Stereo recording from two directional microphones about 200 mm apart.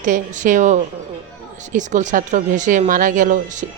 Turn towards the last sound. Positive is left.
turn(degrees=-40)  # may be behind; listen again after turning